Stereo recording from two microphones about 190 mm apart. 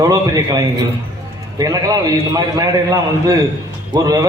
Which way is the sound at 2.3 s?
20° right (ahead or behind).